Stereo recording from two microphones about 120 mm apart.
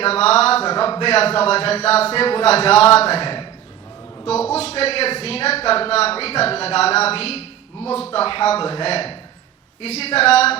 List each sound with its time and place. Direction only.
0.0 s a man's voice: 60° left (ahead or behind)
4.5 s a man's voice: 60° left (ahead or behind)